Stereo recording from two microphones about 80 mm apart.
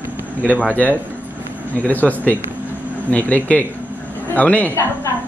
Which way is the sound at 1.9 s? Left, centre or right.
Left.